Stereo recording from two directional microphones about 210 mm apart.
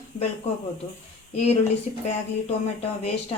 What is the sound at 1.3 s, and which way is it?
Speech, 30° left (ahead or behind).